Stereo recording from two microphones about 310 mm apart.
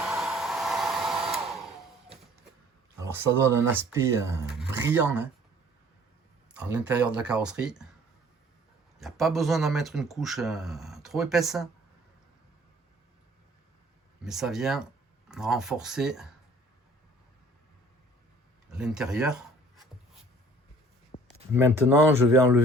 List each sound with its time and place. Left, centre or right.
0.0 s hair dryer: centre
3.0 s speech: centre
6.5 s speech: centre
9.0 s speech: centre
14.3 s speech: centre
18.7 s speech: centre
21.1 s a sound: centre
21.5 s speech: centre